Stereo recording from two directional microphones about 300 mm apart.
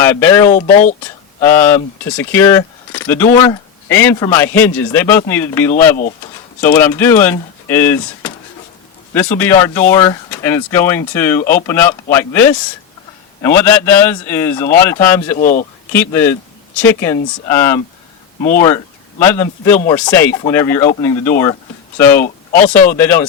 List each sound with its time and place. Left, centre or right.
0.0 s speech: centre
0.5 s speech: left
1.4 s speech: centre
15.4 s speech: left
15.9 s speech: centre
19.2 s speech: centre